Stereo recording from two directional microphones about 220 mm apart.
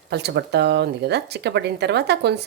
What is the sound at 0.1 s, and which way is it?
Speech, 50° right (ahead or behind).